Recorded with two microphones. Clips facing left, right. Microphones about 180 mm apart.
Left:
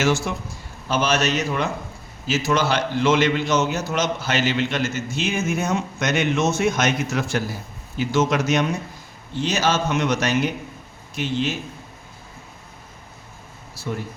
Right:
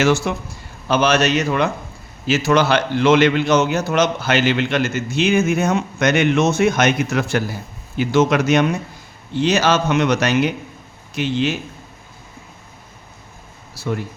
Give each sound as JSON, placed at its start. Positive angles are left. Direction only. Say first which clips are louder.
{"t": 0.0, "sound": "a man's voice", "louder": "right 4 dB", "side_deg": -65}
{"t": 13.8, "sound": "a man's voice", "louder": "right 5 dB", "side_deg": -70}